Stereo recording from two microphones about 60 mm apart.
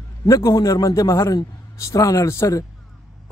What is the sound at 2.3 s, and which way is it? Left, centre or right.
Speech, left.